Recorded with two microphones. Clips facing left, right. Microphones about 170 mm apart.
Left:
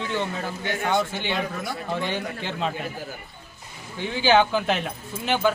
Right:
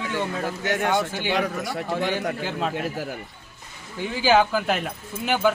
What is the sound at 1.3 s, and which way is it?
Speech, 90° right.